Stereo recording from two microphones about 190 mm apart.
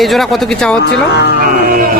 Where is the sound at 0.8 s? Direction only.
60° left (ahead or behind).